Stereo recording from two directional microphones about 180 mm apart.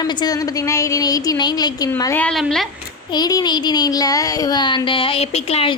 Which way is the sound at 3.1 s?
20° left (ahead or behind).